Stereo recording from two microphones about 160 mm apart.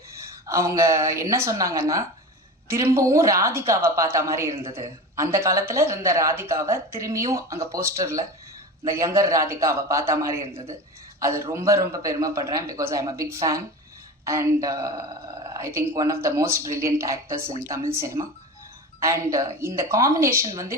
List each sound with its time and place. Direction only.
0.4 s a woman's voice: 20° right (ahead or behind)